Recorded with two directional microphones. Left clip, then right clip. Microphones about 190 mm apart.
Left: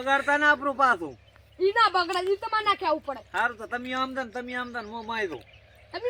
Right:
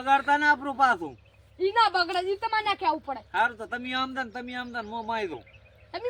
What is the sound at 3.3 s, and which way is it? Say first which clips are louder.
Speech: right 1 dB; 20° right (ahead or behind).